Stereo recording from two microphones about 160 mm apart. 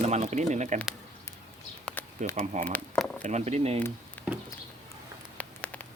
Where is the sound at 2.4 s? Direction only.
50° right (ahead or behind).